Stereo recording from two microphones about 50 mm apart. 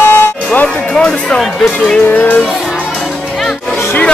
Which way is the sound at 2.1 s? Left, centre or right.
Left.